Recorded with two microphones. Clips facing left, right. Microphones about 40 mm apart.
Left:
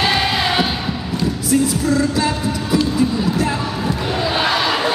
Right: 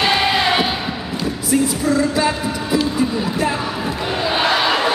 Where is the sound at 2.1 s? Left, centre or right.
Centre.